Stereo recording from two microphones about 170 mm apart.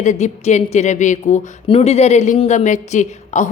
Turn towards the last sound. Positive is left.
turn(degrees=45)  # may be behind; listen again after turning